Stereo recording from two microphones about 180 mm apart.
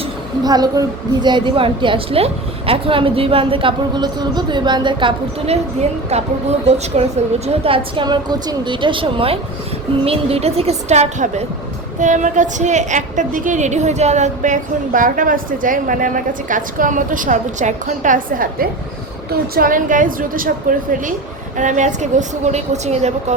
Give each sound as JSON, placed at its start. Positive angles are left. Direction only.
{"t": 0.4, "sound": "a woman's voice", "side_deg": -20}
{"t": 6.7, "sound": "a woman's voice", "side_deg": -35}